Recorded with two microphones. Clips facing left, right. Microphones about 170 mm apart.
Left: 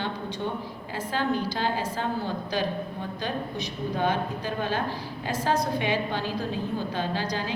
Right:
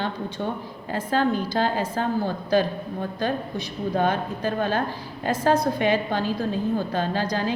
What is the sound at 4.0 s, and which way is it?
A woman's voice, 50° right (ahead or behind).